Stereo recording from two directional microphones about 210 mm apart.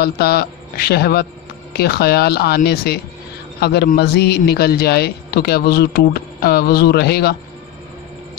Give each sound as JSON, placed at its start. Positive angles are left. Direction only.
{"t": 0.0, "sound": "a man's voice", "side_deg": 50}